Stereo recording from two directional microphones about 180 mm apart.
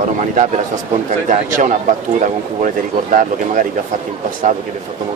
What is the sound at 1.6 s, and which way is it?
Speech, 45° right (ahead or behind).